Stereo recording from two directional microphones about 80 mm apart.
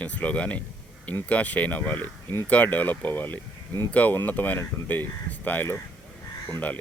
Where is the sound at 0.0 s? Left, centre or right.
Centre.